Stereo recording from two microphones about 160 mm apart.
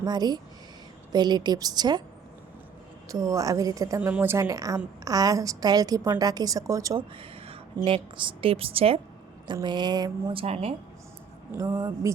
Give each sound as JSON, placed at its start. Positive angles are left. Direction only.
{"t": 0.0, "sound": "a woman's voice", "side_deg": -25}
{"t": 3.1, "sound": "a woman's voice", "side_deg": -20}
{"t": 7.2, "sound": "a sound", "side_deg": -35}
{"t": 7.9, "sound": "a woman's voice", "side_deg": -30}
{"t": 11.5, "sound": "a woman's voice", "side_deg": -25}